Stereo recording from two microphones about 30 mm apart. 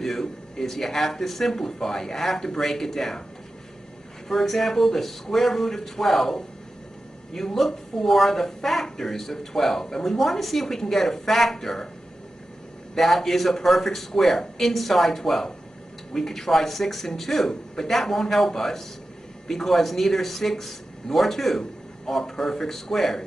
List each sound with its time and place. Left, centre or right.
0.0 s speech: centre
4.3 s speech: centre
10.1 s speech: centre
12.9 s speech: centre